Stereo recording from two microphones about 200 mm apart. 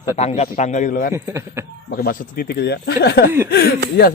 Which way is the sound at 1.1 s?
15° right (ahead or behind).